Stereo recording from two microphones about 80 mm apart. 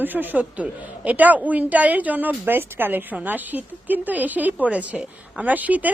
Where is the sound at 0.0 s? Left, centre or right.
Right.